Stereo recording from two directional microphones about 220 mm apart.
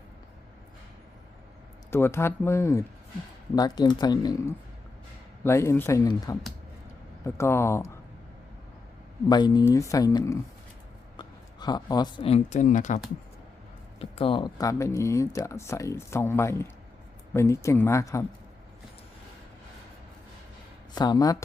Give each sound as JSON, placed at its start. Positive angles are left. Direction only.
{"t": 1.9, "sound": "speech", "side_deg": 10}
{"t": 9.3, "sound": "speech", "side_deg": 20}
{"t": 14.0, "sound": "speech", "side_deg": 25}
{"t": 20.9, "sound": "speech", "side_deg": 20}